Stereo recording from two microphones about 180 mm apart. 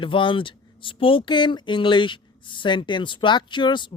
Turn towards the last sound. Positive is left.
turn(degrees=25)  # may be behind; listen again after turning